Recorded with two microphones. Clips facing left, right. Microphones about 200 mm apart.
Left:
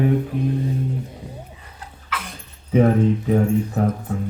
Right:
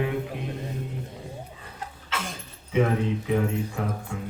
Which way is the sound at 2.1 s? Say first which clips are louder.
Left 2 dB; 25° right (ahead or behind).